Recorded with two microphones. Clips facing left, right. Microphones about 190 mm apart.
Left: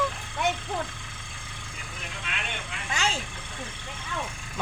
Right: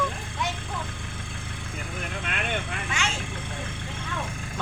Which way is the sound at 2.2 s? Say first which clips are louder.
Right 6 dB; 50° right (ahead or behind).